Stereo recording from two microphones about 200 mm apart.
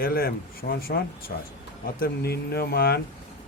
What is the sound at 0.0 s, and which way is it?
Speech, 50° left (ahead or behind).